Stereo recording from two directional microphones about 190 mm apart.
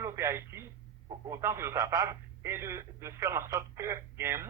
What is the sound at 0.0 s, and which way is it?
Speech, 15° right (ahead or behind).